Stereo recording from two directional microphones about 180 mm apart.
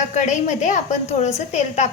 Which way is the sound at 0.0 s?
40° left (ahead or behind).